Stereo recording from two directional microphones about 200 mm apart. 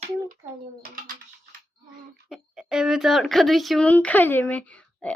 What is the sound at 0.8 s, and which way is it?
Speech, 45° right (ahead or behind).